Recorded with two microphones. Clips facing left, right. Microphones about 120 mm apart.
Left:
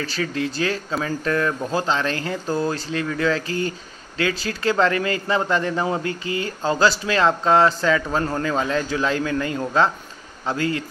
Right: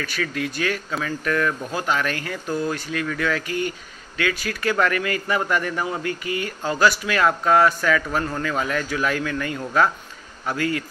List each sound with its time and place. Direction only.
0.0 s speech: 30° left (ahead or behind)